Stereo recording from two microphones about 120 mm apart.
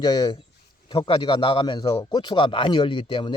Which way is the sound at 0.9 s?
45° left (ahead or behind).